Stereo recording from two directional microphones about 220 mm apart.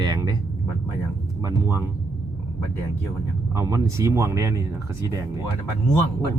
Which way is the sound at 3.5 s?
15° right (ahead or behind).